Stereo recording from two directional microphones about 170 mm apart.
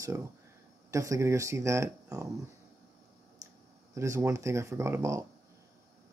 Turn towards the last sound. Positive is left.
turn(degrees=-15)  # may be behind; listen again after turning